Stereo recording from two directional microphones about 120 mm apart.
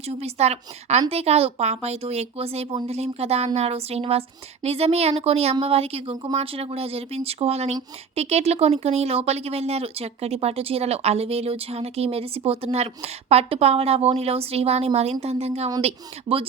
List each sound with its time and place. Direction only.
0.1 s speech: 60° right (ahead or behind)